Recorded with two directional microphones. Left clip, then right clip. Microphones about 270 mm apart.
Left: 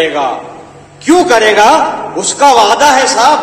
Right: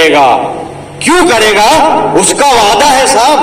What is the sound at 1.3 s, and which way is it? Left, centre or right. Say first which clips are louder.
Speech: left 2 dB; right.